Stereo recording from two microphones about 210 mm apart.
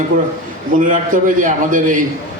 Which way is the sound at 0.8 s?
40° right (ahead or behind).